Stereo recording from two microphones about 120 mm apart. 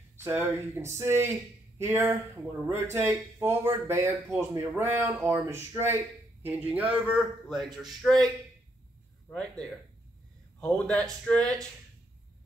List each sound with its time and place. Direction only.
0.2 s speech: 20° right (ahead or behind)
7.4 s a man's voice: centre (ahead or behind)
9.3 s speech: 10° left (ahead or behind)